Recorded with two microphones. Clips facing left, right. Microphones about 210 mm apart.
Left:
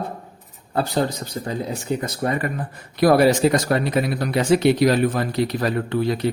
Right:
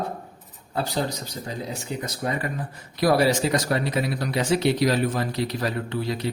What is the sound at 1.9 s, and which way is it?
Speech, 50° left (ahead or behind).